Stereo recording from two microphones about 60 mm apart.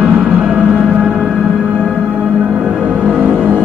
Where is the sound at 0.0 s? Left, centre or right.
Centre.